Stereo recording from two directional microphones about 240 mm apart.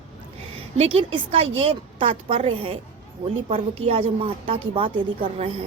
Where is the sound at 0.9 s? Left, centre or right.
Right.